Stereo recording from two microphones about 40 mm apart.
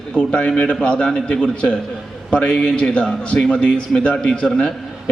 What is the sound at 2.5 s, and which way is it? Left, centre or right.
A man's voice, centre.